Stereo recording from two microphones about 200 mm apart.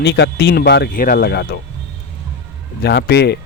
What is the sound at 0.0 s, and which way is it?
Speech, 55° left (ahead or behind).